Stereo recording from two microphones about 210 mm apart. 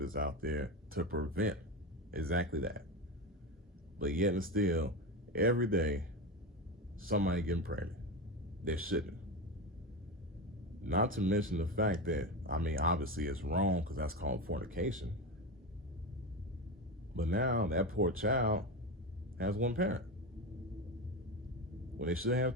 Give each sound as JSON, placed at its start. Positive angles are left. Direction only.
{"t": 0.0, "sound": "a man's voice", "side_deg": -40}
{"t": 3.9, "sound": "a man's voice", "side_deg": -40}
{"t": 10.8, "sound": "a man's voice", "side_deg": -40}
{"t": 17.2, "sound": "a man's voice", "side_deg": -40}
{"t": 21.9, "sound": "a man's voice", "side_deg": -40}